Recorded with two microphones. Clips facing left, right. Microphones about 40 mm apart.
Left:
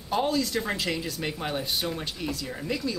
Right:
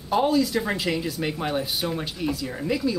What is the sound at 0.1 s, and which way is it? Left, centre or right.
Speech, centre.